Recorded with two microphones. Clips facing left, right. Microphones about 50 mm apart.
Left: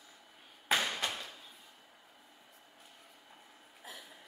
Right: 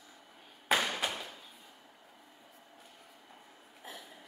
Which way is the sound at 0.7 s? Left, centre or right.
Centre.